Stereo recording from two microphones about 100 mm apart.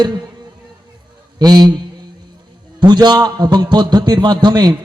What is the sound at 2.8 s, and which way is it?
A man's voice, 45° right (ahead or behind).